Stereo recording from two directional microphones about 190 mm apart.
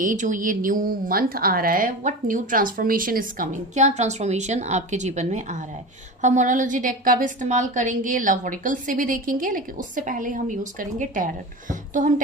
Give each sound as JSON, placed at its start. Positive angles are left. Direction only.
{"t": 0.0, "sound": "a woman's voice", "side_deg": -45}